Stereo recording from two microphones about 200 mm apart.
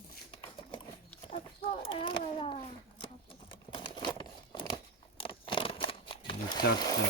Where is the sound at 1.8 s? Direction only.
25° left (ahead or behind).